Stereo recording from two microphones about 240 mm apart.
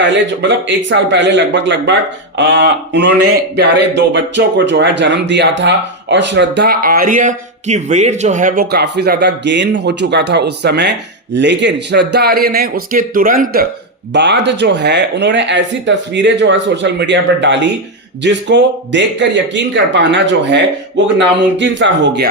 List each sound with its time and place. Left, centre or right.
0.0 s a man's voice: right